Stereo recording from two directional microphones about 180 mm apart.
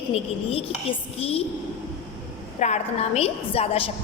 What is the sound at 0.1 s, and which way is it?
A woman's voice, 35° left (ahead or behind).